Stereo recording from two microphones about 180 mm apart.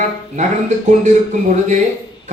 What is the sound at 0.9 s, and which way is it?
Speech, 40° right (ahead or behind).